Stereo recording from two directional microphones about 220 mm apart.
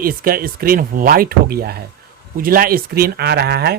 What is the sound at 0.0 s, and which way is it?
Speech, 40° right (ahead or behind).